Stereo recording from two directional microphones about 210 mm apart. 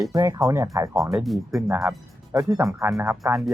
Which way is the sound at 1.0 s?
Centre (ahead or behind).